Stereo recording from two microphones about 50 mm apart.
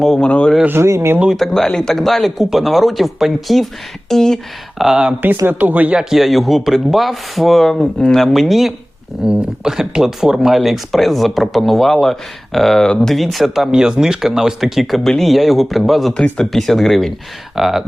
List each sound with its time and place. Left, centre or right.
0.2 s speech: left
0.8 s speech: right
1.4 s speech: centre
4.8 s speech: centre
5.5 s speech: right
6.0 s speech: centre
9.2 s speech: centre
13.7 s speech: centre
16.1 s speech: centre
16.5 s speech: centre